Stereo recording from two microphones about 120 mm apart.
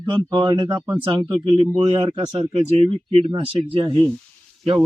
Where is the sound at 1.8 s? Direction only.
55° right (ahead or behind).